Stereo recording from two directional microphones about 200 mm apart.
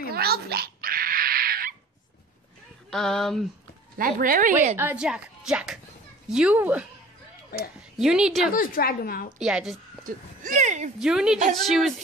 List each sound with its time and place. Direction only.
0.1 s a sound: 50° right (ahead or behind)
2.9 s a woman's voice: centre (ahead or behind)
4.0 s speech: 45° right (ahead or behind)
4.7 s a woman's voice: 5° right (ahead or behind)
8.0 s a woman's voice: 5° right (ahead or behind)
8.5 s a woman's voice: 50° left (ahead or behind)
9.4 s a woman's voice: 5° right (ahead or behind)
10.0 s a sound: 40° right (ahead or behind)
11.0 s a woman's voice: 5° right (ahead or behind)